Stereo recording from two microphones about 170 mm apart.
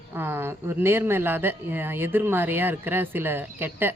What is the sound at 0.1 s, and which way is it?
Speech, 15° right (ahead or behind).